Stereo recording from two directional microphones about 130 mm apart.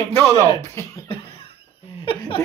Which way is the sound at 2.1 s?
40° left (ahead or behind).